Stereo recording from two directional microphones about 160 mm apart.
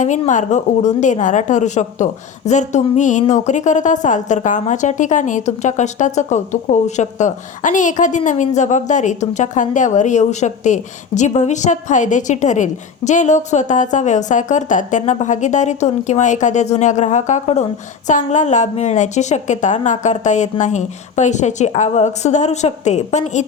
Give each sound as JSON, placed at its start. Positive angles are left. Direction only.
{"t": 0.0, "sound": "a woman's voice", "side_deg": 50}